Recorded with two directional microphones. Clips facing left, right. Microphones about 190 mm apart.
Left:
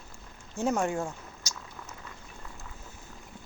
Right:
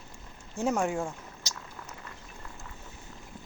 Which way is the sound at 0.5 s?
Centre (ahead or behind).